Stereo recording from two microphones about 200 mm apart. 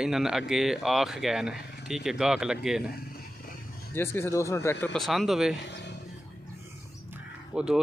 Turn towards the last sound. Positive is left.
turn(degrees=-5)  # may be behind; listen again after turning